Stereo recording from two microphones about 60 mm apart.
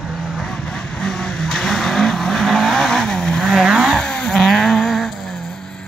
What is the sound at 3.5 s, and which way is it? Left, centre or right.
Vehicle, centre.